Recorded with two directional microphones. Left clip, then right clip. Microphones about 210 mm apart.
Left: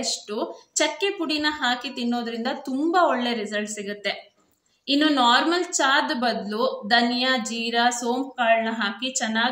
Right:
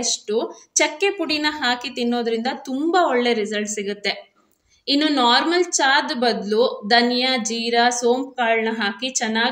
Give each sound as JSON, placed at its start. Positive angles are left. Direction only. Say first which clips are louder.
{"t": 0.0, "sound": "a woman's voice", "louder": "right 5 dB", "side_deg": -10}